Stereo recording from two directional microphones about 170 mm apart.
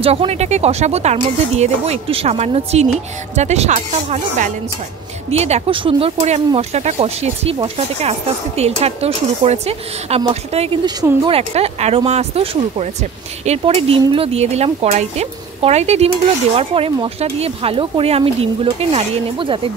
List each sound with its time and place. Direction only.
0.0 s speech: 35° right (ahead or behind)